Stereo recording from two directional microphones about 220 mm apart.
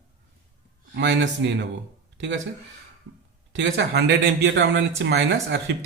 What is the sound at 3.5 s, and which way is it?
Speech, 55° right (ahead or behind).